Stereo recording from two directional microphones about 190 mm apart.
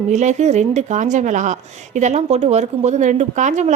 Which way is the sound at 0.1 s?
40° right (ahead or behind).